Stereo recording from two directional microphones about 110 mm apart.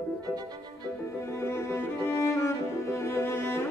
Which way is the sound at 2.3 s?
25° left (ahead or behind).